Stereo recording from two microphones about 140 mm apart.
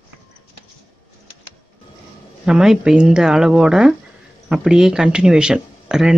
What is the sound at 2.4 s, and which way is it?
Speech, 5° right (ahead or behind).